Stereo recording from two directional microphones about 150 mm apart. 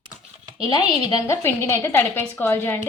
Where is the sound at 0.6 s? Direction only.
25° left (ahead or behind).